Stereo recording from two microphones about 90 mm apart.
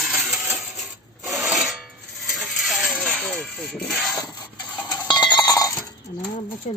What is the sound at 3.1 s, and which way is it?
Speech, 10° left (ahead or behind).